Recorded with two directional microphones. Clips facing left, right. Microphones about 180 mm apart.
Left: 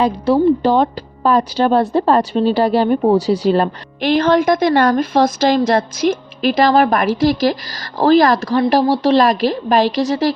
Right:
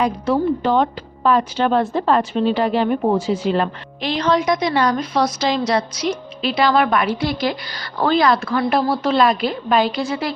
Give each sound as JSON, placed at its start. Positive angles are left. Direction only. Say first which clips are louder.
{"t": 0.0, "sound": "speech", "louder": "left 5 dB", "side_deg": 35}
{"t": 4.0, "sound": "a woman's voice", "louder": "left 5 dB", "side_deg": 50}